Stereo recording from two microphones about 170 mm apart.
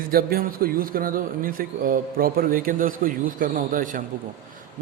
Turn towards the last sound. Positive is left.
turn(degrees=-50)  # may be behind; listen again after turning